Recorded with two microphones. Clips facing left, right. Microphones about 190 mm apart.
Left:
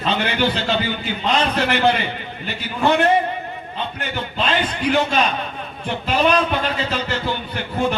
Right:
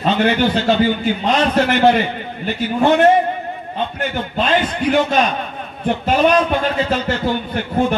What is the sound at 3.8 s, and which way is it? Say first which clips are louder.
A man's voice: right 5 dB; 50° right (ahead or behind).